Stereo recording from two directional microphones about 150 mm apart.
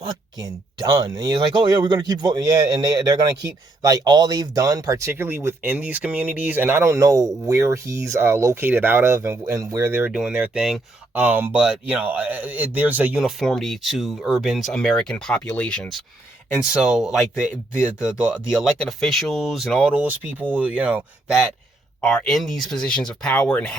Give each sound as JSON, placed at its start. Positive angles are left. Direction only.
{"t": 0.1, "sound": "speech", "side_deg": -25}
{"t": 10.1, "sound": "speech", "side_deg": -5}
{"t": 16.8, "sound": "speech", "side_deg": -5}
{"t": 22.0, "sound": "speech", "side_deg": 5}